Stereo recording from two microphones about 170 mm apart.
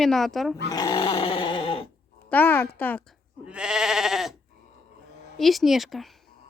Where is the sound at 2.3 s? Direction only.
10° left (ahead or behind).